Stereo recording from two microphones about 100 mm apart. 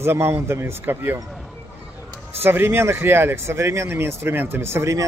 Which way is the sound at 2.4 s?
20° right (ahead or behind).